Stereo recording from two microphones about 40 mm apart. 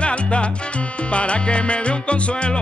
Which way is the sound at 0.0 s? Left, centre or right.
Left.